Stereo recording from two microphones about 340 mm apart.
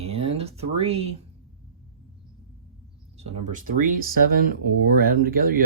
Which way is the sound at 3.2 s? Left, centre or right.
Right.